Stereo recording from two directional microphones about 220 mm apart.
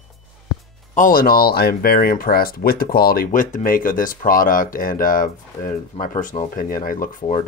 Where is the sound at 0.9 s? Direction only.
40° left (ahead or behind).